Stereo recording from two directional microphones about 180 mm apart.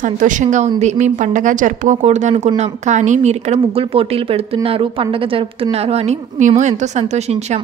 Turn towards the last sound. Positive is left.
turn(degrees=-40)  # may be behind; listen again after turning